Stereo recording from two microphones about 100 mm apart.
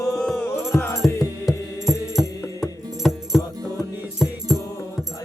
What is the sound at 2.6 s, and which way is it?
Music, centre (ahead or behind).